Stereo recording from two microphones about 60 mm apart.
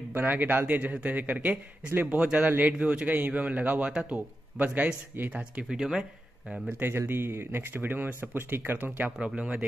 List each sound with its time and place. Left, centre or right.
0.1 s a man's voice: right
5.7 s speech: centre
6.8 s speech: right
9.2 s a man's voice: centre